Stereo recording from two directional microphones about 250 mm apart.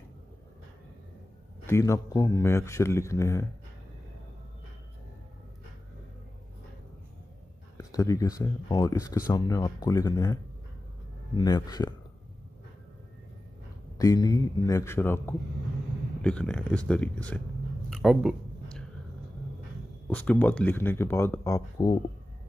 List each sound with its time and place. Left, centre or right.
1.7 s speech: centre
7.7 s speech: centre
13.9 s speech: centre
17.8 s a sound: centre
20.1 s speech: centre